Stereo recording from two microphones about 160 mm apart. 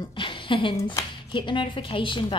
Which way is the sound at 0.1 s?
30° left (ahead or behind).